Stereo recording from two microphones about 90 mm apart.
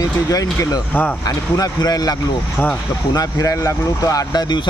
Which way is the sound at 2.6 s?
20° left (ahead or behind).